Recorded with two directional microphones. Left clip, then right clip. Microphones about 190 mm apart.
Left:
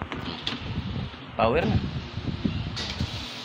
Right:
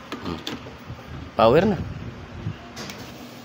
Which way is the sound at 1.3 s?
90° right.